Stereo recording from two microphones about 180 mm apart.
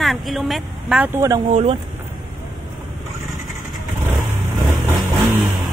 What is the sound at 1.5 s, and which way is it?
Speech, 35° right (ahead or behind).